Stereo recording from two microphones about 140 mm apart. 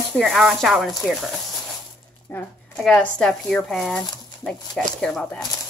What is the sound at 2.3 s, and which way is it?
A woman's voice, 15° left (ahead or behind).